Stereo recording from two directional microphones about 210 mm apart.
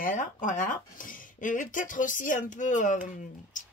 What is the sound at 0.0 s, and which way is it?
Speech, 40° left (ahead or behind).